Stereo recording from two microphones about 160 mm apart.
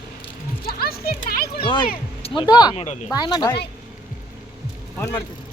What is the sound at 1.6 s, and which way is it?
Speech, 30° left (ahead or behind).